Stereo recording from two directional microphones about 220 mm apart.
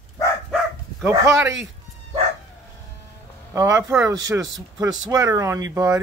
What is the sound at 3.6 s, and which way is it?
Speech, 15° right (ahead or behind).